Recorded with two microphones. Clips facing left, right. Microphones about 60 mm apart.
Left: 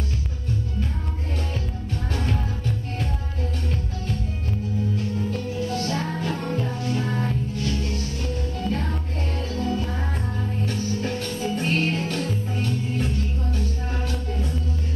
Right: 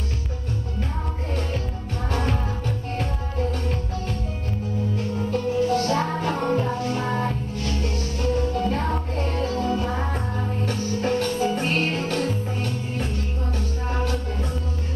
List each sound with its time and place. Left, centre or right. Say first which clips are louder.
5.3 s music: right 6 dB; right
8.5 s music: right 4 dB; right
9.6 s music: left 1 dB; centre
10.6 s music: right 2 dB; right